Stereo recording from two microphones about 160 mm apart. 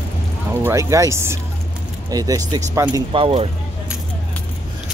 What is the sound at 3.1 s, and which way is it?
Speech, 35° right (ahead or behind).